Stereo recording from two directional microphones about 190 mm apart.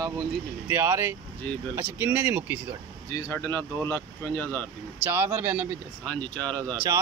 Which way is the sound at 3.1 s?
15° left (ahead or behind).